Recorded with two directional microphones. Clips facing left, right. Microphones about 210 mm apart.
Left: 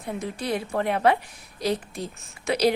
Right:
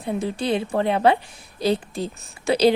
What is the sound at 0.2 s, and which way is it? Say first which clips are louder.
A woman's voice: right 4 dB; 30° right (ahead or behind).